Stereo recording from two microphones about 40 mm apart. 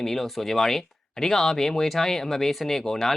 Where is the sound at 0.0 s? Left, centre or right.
Centre.